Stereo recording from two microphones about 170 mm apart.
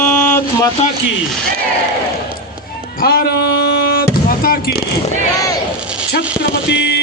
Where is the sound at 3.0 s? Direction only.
60° left (ahead or behind).